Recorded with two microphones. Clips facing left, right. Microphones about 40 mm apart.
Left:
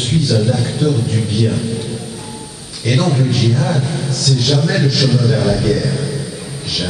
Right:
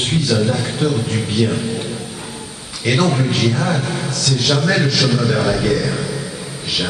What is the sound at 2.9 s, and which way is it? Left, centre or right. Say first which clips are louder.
A man's voice: left 1 dB; centre.